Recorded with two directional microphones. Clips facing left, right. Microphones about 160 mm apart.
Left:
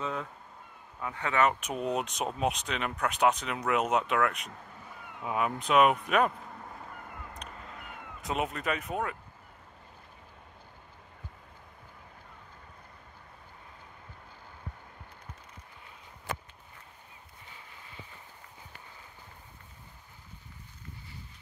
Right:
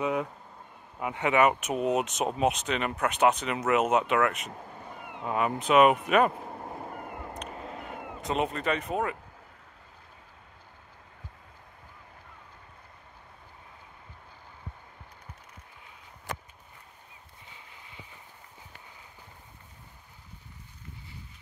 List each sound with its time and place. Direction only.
0.0 s speech: 15° right (ahead or behind)
6.3 s cat: 40° right (ahead or behind)
7.4 s vehicle: 45° right (ahead or behind)
7.8 s a sound: 30° right (ahead or behind)
8.2 s speech: centre (ahead or behind)